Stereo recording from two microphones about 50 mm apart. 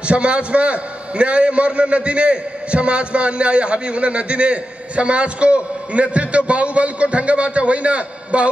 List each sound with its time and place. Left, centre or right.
0.0 s a man's voice: right